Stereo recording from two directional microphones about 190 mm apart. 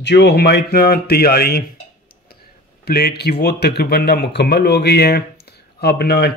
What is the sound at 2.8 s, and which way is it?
Speech, 55° left (ahead or behind).